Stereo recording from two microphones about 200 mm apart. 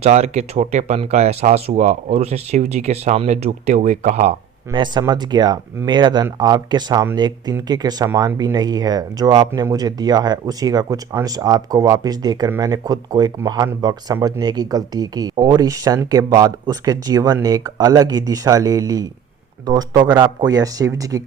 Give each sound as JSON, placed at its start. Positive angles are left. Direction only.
{"t": 0.0, "sound": "speech", "side_deg": -35}